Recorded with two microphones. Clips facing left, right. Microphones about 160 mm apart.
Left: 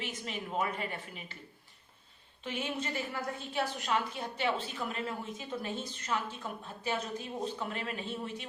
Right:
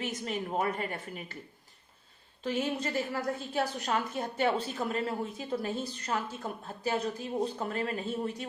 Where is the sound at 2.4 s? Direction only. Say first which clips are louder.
Right 5 dB; 40° right (ahead or behind).